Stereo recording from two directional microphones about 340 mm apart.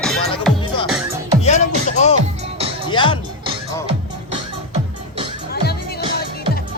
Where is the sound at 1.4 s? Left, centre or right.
Centre.